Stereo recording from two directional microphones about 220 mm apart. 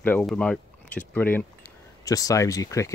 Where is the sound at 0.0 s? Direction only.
5° left (ahead or behind).